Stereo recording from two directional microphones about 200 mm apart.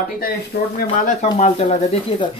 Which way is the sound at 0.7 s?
40° left (ahead or behind).